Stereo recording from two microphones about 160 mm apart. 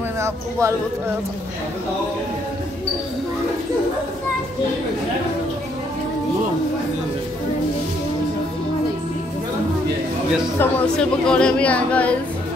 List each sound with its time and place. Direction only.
0.2 s speech: 15° right (ahead or behind)
10.6 s speech: 5° left (ahead or behind)